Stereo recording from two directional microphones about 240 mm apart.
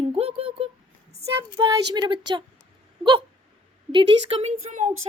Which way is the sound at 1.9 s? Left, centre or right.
Centre.